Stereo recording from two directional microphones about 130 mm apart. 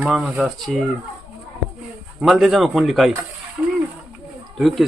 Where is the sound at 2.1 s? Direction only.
5° right (ahead or behind).